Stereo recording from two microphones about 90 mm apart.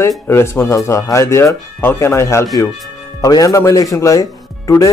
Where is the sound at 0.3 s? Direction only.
25° left (ahead or behind).